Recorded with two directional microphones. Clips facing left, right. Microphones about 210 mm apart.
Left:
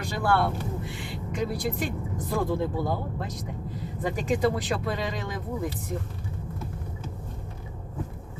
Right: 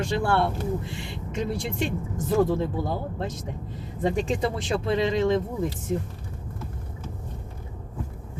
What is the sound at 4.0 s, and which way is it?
Speech, 25° right (ahead or behind).